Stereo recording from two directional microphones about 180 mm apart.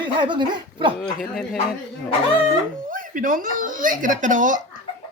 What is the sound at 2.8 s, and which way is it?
Speech, 50° right (ahead or behind).